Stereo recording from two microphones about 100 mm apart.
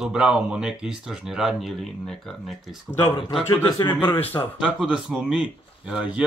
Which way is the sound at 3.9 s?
20° left (ahead or behind).